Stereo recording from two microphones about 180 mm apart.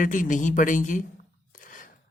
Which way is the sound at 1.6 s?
50° left (ahead or behind).